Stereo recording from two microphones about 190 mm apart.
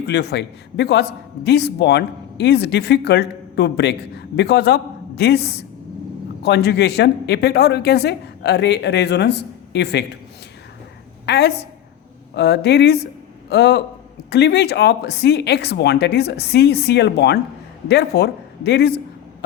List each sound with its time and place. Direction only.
0.0 s a man's voice: 60° left (ahead or behind)
11.3 s a man's voice: 60° left (ahead or behind)